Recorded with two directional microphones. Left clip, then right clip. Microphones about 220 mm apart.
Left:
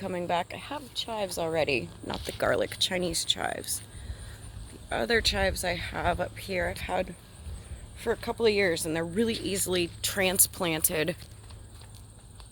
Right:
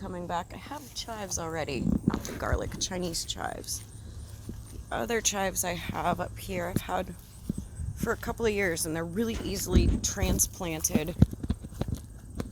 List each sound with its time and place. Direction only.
0.0 s speech: 25° left (ahead or behind)
2.8 s speech: 10° left (ahead or behind)
4.9 s speech: 5° right (ahead or behind)
9.6 s speech: 15° left (ahead or behind)